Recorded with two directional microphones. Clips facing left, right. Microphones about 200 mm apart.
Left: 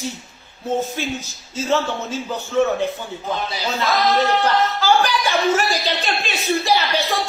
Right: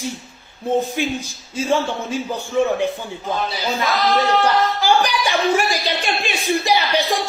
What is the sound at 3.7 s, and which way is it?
Speech, 15° right (ahead or behind).